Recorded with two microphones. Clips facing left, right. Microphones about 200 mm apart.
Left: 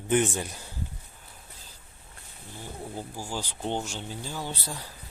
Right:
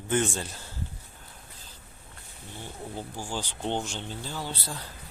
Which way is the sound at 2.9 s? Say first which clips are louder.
Right 1 dB; 5° left (ahead or behind).